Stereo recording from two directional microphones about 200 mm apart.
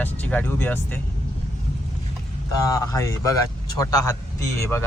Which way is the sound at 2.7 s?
15° left (ahead or behind).